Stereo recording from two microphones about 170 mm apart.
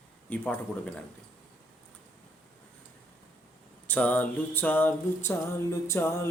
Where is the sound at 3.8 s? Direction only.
10° left (ahead or behind).